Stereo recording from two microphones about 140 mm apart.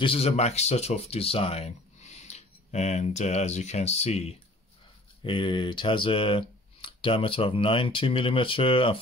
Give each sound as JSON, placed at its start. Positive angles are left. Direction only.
{"t": 0.0, "sound": "speech", "side_deg": 45}
{"t": 5.2, "sound": "speech", "side_deg": 35}